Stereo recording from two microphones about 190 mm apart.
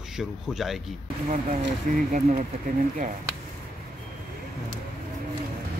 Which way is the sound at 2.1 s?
40° right (ahead or behind).